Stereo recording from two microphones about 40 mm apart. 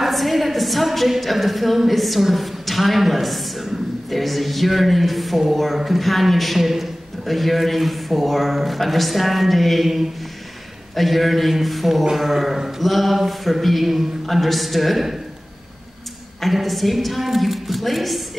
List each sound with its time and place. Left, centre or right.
0.0 s a woman's voice: centre
16.3 s a woman's voice: centre